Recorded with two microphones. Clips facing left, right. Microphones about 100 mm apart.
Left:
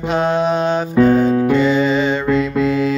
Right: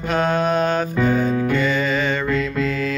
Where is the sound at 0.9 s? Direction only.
45° left (ahead or behind).